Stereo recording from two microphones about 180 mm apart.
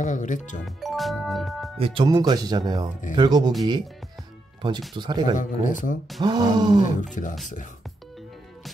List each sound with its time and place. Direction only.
0.0 s speech: 45° left (ahead or behind)
0.7 s music: centre (ahead or behind)
1.8 s speech: 30° right (ahead or behind)
4.6 s speech: 25° right (ahead or behind)
5.3 s speech: 45° left (ahead or behind)
6.2 s speech: 25° right (ahead or behind)
7.2 s speech: 45° left (ahead or behind)